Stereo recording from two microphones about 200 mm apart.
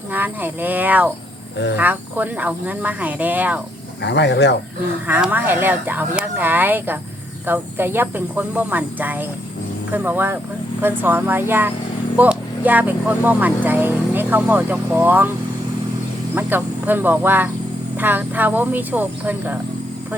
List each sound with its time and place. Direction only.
0.1 s speech: 10° right (ahead or behind)
4.0 s speech: 60° left (ahead or behind)
5.0 s speech: 10° right (ahead or behind)
16.3 s speech: 10° right (ahead or behind)